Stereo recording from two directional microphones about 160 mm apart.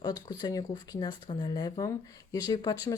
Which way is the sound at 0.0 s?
25° left (ahead or behind).